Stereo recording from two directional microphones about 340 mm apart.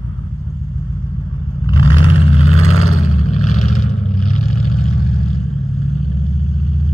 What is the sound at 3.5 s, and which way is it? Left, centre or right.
Vehicle, left.